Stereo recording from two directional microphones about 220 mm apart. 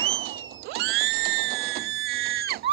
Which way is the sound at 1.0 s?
70° right (ahead or behind).